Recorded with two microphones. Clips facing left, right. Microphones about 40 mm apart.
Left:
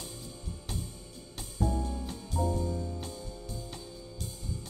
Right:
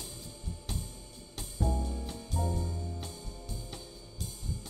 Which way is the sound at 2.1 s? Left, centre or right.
Left.